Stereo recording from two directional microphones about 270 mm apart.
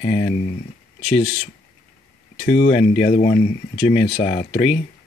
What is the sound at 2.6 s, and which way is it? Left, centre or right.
Speech, left.